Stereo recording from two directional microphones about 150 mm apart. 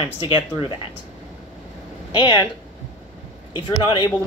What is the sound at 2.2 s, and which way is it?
Speech, 30° left (ahead or behind).